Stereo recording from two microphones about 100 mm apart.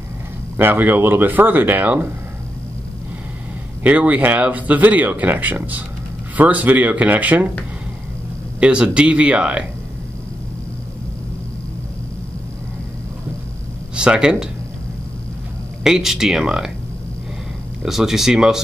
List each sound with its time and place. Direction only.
0.6 s speech: 20° right (ahead or behind)
3.8 s speech: 15° right (ahead or behind)
8.5 s speech: 10° right (ahead or behind)
13.9 s speech: 10° right (ahead or behind)
15.8 s speech: 5° right (ahead or behind)
17.8 s speech: 5° right (ahead or behind)